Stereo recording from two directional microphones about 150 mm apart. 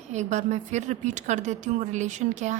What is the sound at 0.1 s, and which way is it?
A woman's voice, 50° right (ahead or behind).